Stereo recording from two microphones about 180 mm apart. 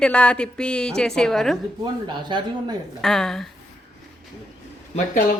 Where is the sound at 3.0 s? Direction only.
Centre (ahead or behind).